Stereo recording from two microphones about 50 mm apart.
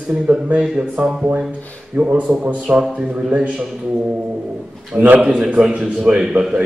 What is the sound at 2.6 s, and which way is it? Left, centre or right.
Speech, centre.